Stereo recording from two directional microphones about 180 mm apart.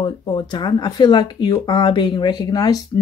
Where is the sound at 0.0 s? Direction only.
25° left (ahead or behind).